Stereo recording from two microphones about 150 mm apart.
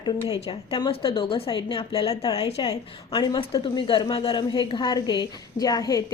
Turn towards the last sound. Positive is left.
turn(degrees=25)  # may be behind; listen again after turning